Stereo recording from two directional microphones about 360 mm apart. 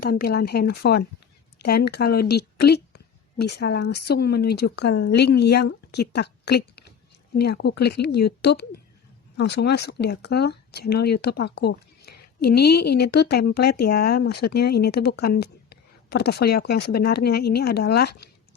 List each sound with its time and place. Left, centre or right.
0.0 s a woman's voice: left